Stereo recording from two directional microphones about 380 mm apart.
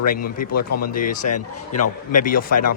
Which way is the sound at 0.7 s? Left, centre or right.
Left.